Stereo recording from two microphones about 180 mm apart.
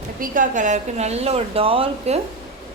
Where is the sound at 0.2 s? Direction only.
45° right (ahead or behind).